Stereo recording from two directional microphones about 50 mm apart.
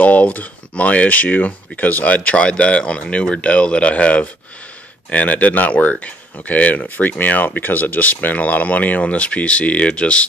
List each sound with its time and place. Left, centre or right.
0.0 s speech: left